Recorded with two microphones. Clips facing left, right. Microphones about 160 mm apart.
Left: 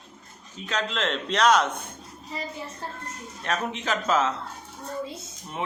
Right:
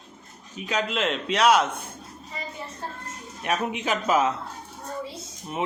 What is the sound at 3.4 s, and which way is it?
Speech, 10° right (ahead or behind).